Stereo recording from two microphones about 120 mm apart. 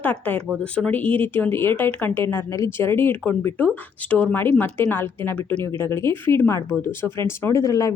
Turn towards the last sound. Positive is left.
turn(degrees=30)  # may be behind; listen again after turning